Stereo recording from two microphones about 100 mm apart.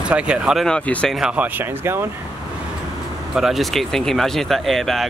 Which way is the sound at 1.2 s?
5° right (ahead or behind).